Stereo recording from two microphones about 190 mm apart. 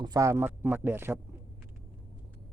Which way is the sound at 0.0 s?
20° right (ahead or behind).